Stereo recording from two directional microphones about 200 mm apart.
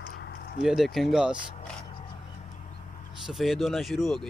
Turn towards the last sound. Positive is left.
turn(degrees=0)  # may be behind; listen again after turning